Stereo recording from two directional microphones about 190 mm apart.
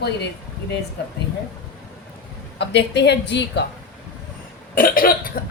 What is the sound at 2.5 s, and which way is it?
A woman's voice, 65° left (ahead or behind).